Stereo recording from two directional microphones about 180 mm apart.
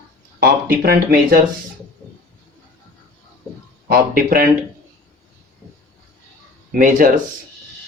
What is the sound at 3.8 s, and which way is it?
Speech, 55° right (ahead or behind).